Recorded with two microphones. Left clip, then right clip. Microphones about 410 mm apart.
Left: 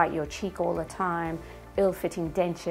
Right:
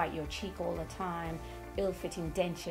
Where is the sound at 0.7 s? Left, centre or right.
Left.